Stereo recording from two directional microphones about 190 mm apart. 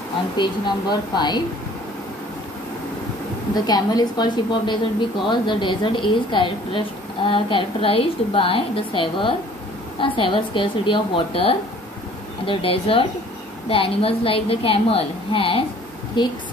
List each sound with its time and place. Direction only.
0.4 s a woman's voice: 20° left (ahead or behind)
3.5 s a woman's voice: 20° left (ahead or behind)